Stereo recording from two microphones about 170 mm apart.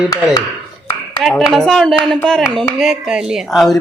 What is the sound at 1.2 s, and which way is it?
Speech, centre (ahead or behind).